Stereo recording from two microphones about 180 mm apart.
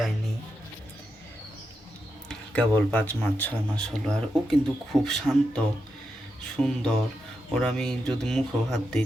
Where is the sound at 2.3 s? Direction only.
5° left (ahead or behind).